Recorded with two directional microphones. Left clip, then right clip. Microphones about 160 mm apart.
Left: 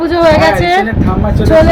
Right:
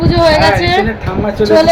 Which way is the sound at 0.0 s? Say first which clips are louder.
Left 1 dB; 10° left (ahead or behind).